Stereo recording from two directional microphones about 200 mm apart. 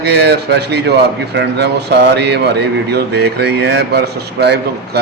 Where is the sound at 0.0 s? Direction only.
55° right (ahead or behind).